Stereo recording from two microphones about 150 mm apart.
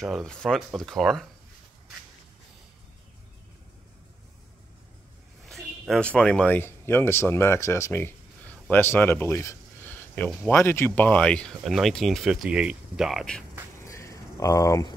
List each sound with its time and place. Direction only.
0.0 s speech: centre (ahead or behind)
5.4 s speech: centre (ahead or behind)
13.8 s a sound: 20° left (ahead or behind)